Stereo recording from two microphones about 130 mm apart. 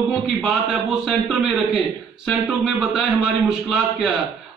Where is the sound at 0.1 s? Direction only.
Centre (ahead or behind).